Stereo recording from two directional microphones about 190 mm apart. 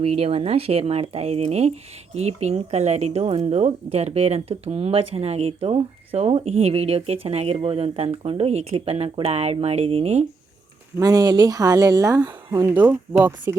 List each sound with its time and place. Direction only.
0.0 s speech: 30° right (ahead or behind)
10.9 s speech: 20° right (ahead or behind)
12.7 s speech: 10° right (ahead or behind)